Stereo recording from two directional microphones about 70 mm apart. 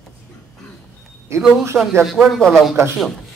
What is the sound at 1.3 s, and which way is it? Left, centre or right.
Speech, right.